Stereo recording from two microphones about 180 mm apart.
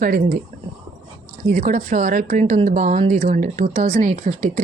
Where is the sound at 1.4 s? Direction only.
45° right (ahead or behind).